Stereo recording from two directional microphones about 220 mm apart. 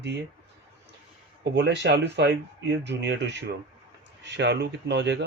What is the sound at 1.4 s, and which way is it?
Speech, 50° right (ahead or behind).